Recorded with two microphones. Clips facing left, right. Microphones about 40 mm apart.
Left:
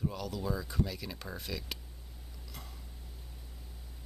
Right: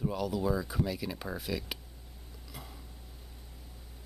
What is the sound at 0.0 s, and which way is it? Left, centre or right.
Speech, centre.